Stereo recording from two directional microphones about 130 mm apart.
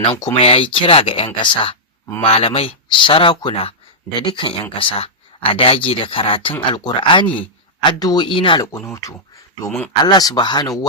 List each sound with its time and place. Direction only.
0.1 s speech: 30° left (ahead or behind)
0.4 s speech: 45° left (ahead or behind)
9.6 s speech: 10° left (ahead or behind)
10.0 s speech: 30° left (ahead or behind)